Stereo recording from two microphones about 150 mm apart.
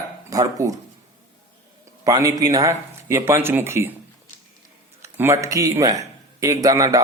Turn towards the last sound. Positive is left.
turn(degrees=-25)  # may be behind; listen again after turning